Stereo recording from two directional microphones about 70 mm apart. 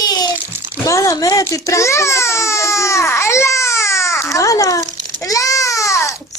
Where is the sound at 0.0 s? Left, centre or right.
Left.